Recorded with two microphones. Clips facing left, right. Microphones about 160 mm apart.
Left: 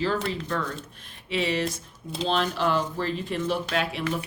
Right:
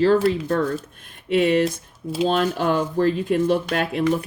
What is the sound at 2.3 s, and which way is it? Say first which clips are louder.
Speech: right 4 dB; 45° right (ahead or behind).